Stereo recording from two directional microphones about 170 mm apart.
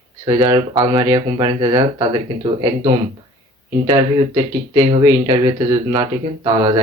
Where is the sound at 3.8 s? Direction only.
25° right (ahead or behind).